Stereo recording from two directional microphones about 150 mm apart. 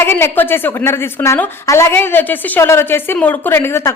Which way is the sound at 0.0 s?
15° left (ahead or behind).